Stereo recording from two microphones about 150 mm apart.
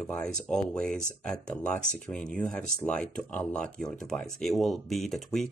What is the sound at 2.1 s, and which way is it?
Speech, 5° left (ahead or behind).